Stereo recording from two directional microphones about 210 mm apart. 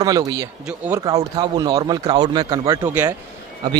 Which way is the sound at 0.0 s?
15° right (ahead or behind).